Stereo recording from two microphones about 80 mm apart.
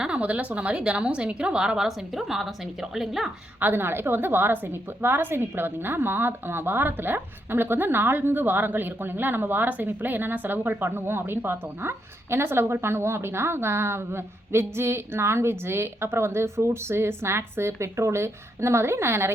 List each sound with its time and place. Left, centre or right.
0.0 s a woman's voice: centre
3.6 s a woman's voice: right